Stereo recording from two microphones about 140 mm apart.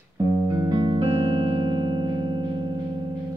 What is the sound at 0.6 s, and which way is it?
Music, 35° right (ahead or behind).